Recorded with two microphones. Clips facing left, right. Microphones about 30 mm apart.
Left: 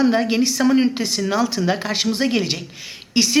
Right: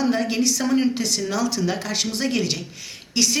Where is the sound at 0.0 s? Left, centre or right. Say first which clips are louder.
Left 4 dB; left.